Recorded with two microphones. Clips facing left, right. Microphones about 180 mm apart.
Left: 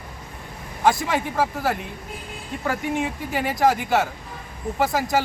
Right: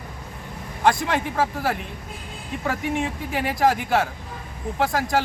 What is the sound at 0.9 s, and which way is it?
Speech, centre (ahead or behind).